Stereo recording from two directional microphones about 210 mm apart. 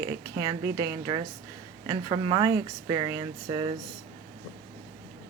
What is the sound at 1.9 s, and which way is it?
Speech, 20° right (ahead or behind).